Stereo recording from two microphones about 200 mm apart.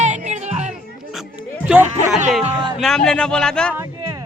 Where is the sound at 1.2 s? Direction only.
5° right (ahead or behind).